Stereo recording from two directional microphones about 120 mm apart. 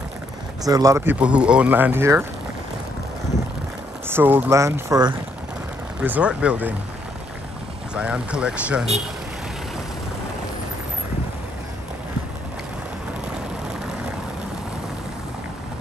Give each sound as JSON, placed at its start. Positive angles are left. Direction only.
{"t": 0.7, "sound": "speech", "side_deg": -30}
{"t": 1.0, "sound": "speech", "side_deg": -10}
{"t": 4.1, "sound": "speech", "side_deg": -15}
{"t": 5.9, "sound": "speech", "side_deg": -10}
{"t": 7.9, "sound": "speech", "side_deg": -10}